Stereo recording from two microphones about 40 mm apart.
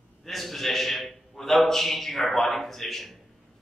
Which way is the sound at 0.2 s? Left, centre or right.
Centre.